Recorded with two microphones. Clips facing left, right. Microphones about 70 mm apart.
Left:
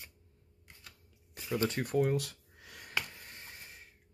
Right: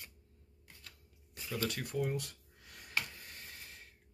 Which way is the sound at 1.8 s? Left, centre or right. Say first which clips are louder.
Left 6 dB; left.